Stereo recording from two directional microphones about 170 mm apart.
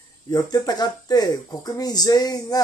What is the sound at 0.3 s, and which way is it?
Speech, 25° left (ahead or behind).